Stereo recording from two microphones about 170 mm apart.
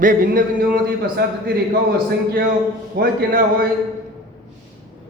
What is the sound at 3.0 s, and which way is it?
Speech, 60° right (ahead or behind).